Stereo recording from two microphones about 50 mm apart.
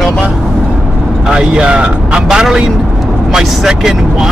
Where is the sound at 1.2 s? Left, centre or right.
Centre.